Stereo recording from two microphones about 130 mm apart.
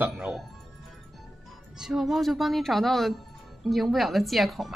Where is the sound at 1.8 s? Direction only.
Centre (ahead or behind).